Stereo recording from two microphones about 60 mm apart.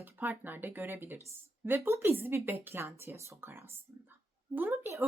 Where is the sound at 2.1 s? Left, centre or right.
Right.